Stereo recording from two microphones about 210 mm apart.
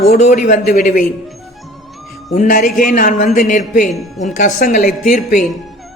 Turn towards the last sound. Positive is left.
turn(degrees=35)  # may be behind; listen again after turning